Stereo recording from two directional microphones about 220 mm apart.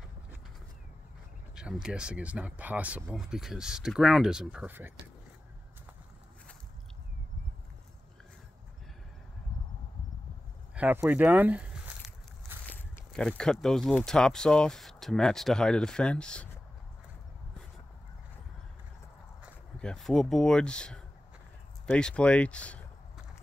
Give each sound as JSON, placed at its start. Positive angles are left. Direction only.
{"t": 1.5, "sound": "speech", "side_deg": -5}
{"t": 10.7, "sound": "a sound", "side_deg": -5}
{"t": 12.6, "sound": "speech", "side_deg": 5}
{"t": 19.8, "sound": "speech", "side_deg": 5}